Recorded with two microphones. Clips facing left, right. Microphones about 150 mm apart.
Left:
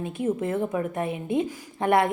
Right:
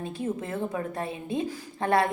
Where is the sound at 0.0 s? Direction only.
20° left (ahead or behind).